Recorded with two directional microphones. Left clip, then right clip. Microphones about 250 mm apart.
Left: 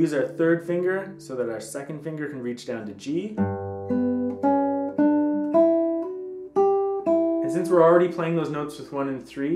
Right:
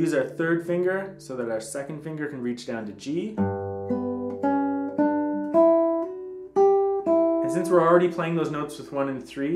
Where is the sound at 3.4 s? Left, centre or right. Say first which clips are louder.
Right 1 dB; centre.